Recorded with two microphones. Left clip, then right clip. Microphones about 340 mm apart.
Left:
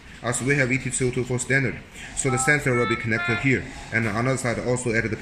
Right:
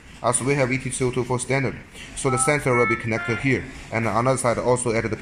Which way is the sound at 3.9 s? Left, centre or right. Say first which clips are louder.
Right 1 dB; right.